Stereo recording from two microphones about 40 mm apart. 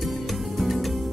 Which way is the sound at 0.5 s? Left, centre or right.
Centre.